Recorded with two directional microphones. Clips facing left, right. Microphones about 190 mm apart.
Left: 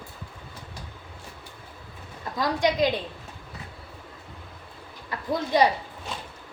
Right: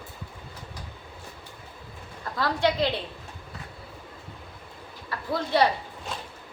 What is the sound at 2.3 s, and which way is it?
Speech, 15° left (ahead or behind).